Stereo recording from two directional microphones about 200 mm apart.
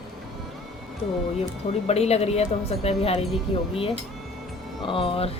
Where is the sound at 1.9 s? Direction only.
30° left (ahead or behind).